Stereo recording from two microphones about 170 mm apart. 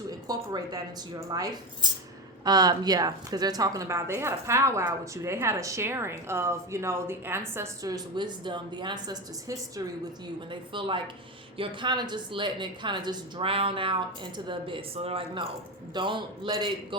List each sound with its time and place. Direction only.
0.3 s a woman's voice: 20° right (ahead or behind)